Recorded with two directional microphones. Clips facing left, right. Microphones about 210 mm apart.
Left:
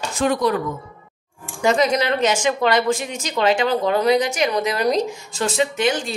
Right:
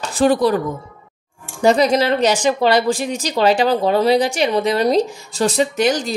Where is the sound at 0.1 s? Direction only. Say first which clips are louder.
Right 5 dB; 35° right (ahead or behind).